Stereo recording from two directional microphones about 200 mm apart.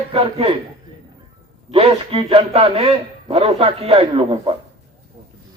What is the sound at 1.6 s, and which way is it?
A man's voice, 30° right (ahead or behind).